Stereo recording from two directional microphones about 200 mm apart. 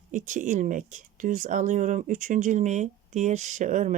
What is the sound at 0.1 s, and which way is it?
Speech, 40° right (ahead or behind).